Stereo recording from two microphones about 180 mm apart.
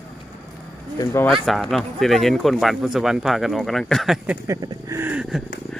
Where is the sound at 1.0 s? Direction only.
15° left (ahead or behind).